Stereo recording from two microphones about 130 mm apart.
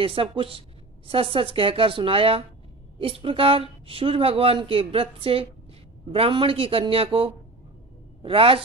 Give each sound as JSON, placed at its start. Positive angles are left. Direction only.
{"t": 0.0, "sound": "speech", "side_deg": -45}